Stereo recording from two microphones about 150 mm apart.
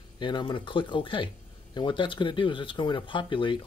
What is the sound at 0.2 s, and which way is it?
Speech, 30° left (ahead or behind).